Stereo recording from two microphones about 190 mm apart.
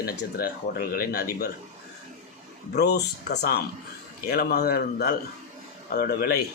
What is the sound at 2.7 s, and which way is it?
A man's voice, 60° left (ahead or behind).